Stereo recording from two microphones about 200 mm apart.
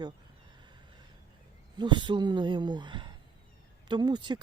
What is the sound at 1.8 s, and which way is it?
Speech, 25° right (ahead or behind).